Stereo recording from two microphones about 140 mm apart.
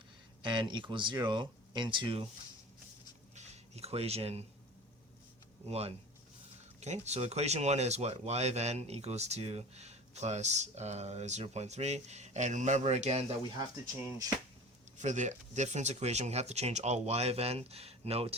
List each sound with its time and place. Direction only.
0.4 s speech: 35° right (ahead or behind)
3.3 s a sound: 50° right (ahead or behind)
5.6 s speech: 45° right (ahead or behind)
14.9 s speech: 60° right (ahead or behind)